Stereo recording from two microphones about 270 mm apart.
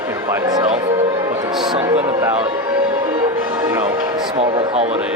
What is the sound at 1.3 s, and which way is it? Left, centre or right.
Music, centre.